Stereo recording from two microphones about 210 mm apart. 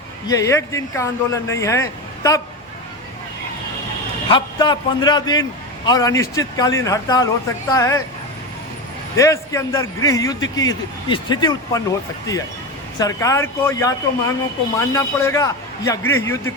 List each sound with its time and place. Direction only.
0.3 s a man's voice: 15° left (ahead or behind)
4.3 s a man's voice: 20° left (ahead or behind)
9.1 s a man's voice: 15° left (ahead or behind)